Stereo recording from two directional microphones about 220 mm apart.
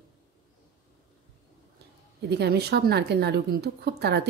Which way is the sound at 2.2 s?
50° right (ahead or behind).